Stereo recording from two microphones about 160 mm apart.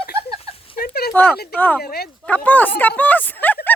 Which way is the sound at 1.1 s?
10° left (ahead or behind).